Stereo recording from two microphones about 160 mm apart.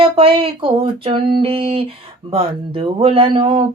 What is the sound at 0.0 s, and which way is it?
Speech, 35° right (ahead or behind).